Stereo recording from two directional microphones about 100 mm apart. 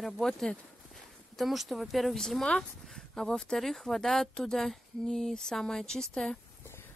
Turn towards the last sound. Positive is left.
turn(degrees=5)  # may be behind; listen again after turning